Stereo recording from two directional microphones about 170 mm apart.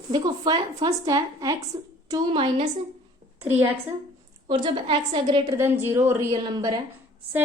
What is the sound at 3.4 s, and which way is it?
Speech, 10° right (ahead or behind).